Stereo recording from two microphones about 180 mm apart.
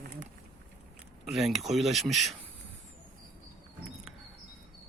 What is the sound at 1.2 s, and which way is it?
Speech, centre (ahead or behind).